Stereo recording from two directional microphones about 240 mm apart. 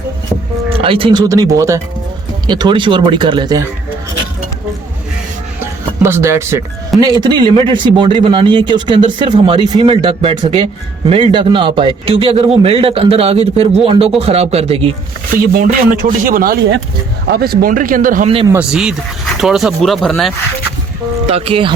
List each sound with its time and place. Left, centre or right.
0.7 s speech: right
5.5 s a sound: centre
7.0 s speech: centre
18.5 s speech: centre
21.2 s speech: right